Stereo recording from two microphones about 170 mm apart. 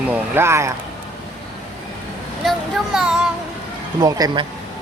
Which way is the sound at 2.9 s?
5° right (ahead or behind).